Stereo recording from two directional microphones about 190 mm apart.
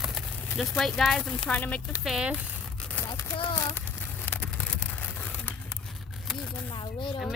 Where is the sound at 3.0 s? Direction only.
20° left (ahead or behind).